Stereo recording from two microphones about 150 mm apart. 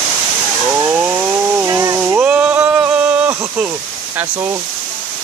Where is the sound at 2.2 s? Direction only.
10° right (ahead or behind).